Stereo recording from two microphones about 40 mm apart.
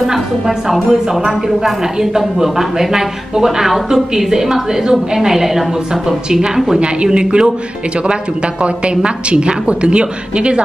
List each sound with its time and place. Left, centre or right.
0.0 s speech: centre
7.1 s a woman's voice: right
9.0 s a woman's voice: right